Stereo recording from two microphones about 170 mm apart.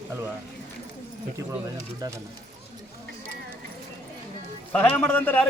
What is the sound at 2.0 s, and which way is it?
Speech, 25° right (ahead or behind).